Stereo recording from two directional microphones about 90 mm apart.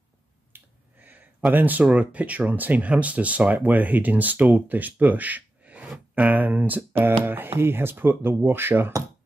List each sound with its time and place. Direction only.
0.5 s finger snapping: 20° right (ahead or behind)
1.5 s speech: 20° right (ahead or behind)